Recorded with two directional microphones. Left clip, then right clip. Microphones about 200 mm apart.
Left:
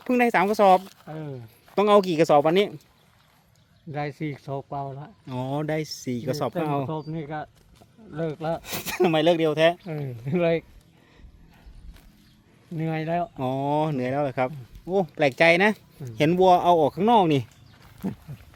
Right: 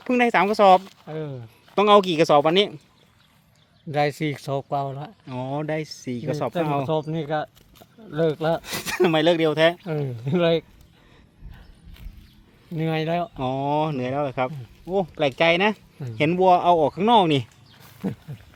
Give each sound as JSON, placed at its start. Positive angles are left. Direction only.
{"t": 0.0, "sound": "speech", "side_deg": 0}
{"t": 1.0, "sound": "speech", "side_deg": -30}
{"t": 1.7, "sound": "speech", "side_deg": 0}
{"t": 3.9, "sound": "speech", "side_deg": -65}
{"t": 5.2, "sound": "speech", "side_deg": 10}
{"t": 6.8, "sound": "speech", "side_deg": -65}
{"t": 8.1, "sound": "speech", "side_deg": -50}
{"t": 8.6, "sound": "speech", "side_deg": -5}
{"t": 9.8, "sound": "speech", "side_deg": -40}
{"t": 12.7, "sound": "speech", "side_deg": -35}
{"t": 13.3, "sound": "speech", "side_deg": 0}